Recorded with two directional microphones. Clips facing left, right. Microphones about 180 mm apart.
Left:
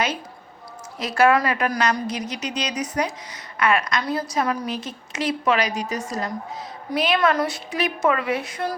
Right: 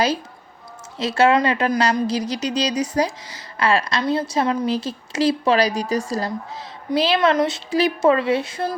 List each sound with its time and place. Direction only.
0.9 s a woman's voice: 25° right (ahead or behind)